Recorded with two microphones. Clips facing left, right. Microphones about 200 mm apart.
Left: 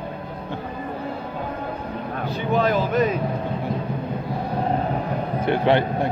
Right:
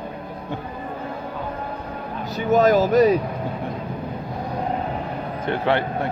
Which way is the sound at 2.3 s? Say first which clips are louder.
Right 5 dB; 40° right (ahead or behind).